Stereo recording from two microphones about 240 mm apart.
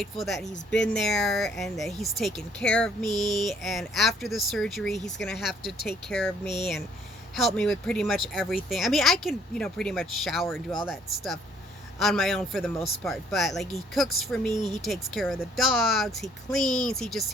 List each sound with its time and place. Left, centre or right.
0.0 s speech: centre
14.5 s speech: centre
14.8 s speech: centre